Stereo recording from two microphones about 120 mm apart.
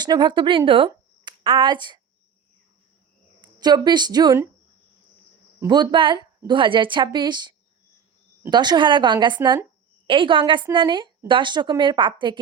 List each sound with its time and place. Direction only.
0.0 s a woman's voice: 40° right (ahead or behind)
3.4 s a woman's voice: 35° right (ahead or behind)
5.6 s a woman's voice: 35° right (ahead or behind)